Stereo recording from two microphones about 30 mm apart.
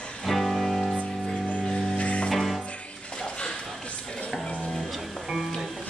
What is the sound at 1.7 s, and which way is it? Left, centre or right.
Music, left.